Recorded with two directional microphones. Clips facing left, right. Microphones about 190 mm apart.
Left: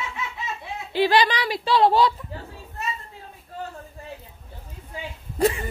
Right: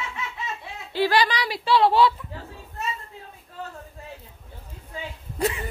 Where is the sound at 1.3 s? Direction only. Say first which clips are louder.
Even; 50° left (ahead or behind).